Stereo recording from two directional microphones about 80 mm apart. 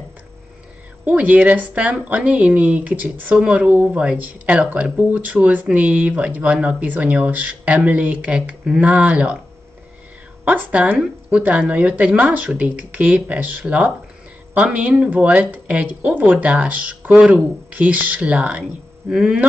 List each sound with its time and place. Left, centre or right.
1.0 s a woman's voice: centre
10.4 s a woman's voice: centre